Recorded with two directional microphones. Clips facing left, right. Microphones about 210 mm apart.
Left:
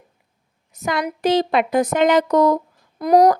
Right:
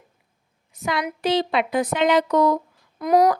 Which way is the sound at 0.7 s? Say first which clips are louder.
Left 3 dB; 45° left (ahead or behind).